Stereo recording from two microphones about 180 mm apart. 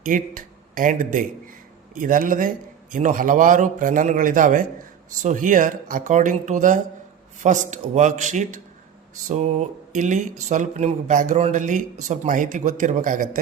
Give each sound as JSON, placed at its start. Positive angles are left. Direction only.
{"t": 0.0, "sound": "speech", "side_deg": -50}